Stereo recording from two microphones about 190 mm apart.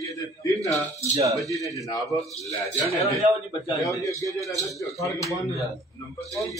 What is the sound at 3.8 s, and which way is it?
Speech, 15° left (ahead or behind).